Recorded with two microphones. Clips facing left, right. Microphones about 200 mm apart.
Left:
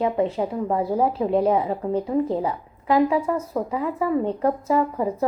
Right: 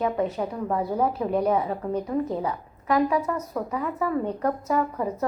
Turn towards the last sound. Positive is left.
turn(degrees=25)  # may be behind; listen again after turning